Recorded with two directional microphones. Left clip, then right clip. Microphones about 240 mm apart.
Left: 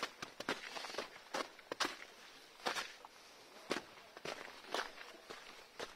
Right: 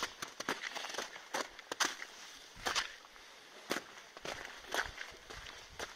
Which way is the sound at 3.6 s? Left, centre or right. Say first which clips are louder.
Right 2 dB; right.